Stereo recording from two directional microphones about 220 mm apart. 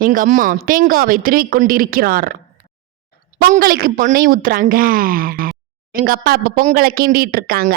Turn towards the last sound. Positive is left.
turn(degrees=-40)  # may be behind; listen again after turning